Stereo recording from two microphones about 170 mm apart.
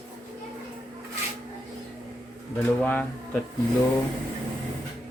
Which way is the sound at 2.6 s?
10° left (ahead or behind).